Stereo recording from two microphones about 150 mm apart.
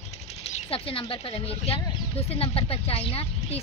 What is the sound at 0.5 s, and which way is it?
Speech, 45° left (ahead or behind).